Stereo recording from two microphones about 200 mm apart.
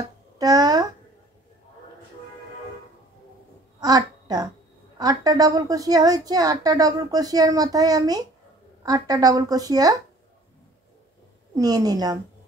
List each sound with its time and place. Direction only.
0.4 s a child's voice: 20° right (ahead or behind)
3.8 s a child's voice: 20° right (ahead or behind)
11.5 s a child's voice: 20° right (ahead or behind)